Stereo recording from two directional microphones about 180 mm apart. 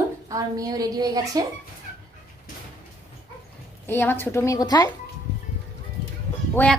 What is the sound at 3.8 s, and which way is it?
A woman's voice, 10° left (ahead or behind).